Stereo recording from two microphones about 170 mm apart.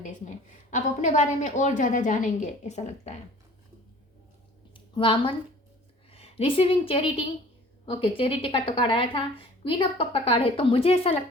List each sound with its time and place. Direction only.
0.7 s a woman's voice: 45° left (ahead or behind)
4.7 s a sound: 30° left (ahead or behind)
6.1 s a woman's voice: 35° left (ahead or behind)